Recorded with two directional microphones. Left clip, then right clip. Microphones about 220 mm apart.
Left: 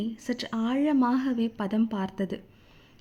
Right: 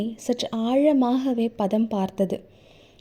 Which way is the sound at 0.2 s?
15° left (ahead or behind).